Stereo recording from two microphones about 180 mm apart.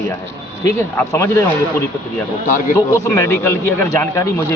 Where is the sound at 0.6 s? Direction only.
15° left (ahead or behind).